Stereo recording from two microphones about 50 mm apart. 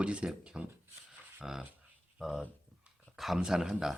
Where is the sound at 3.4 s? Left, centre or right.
Centre.